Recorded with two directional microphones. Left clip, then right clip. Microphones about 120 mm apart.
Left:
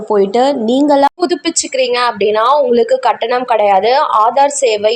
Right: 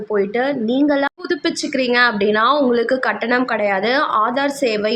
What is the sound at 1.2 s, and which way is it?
A woman's voice, 45° left (ahead or behind).